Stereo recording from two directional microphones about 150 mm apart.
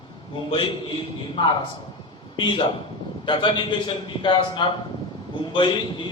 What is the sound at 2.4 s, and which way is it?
A man's voice, 30° left (ahead or behind).